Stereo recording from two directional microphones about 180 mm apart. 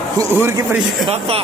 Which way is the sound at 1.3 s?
30° right (ahead or behind).